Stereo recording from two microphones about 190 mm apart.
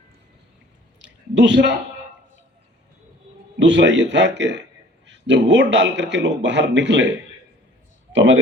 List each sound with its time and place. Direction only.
0.9 s a sound: 70° right (ahead or behind)
3.6 s a man's voice: 70° right (ahead or behind)
8.1 s speech: 75° right (ahead or behind)